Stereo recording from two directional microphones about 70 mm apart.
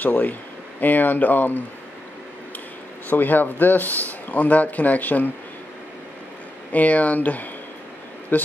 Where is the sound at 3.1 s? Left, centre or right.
Left.